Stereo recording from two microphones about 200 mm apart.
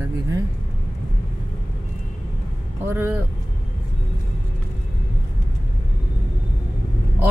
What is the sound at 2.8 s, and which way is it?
Speech, 10° right (ahead or behind).